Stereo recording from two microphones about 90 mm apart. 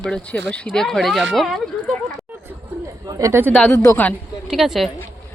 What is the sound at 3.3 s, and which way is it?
Speech, 25° right (ahead or behind).